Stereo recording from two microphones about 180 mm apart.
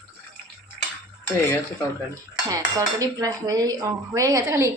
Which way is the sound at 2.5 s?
20° right (ahead or behind).